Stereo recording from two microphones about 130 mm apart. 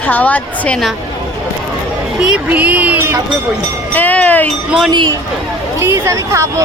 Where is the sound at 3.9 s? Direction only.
10° left (ahead or behind).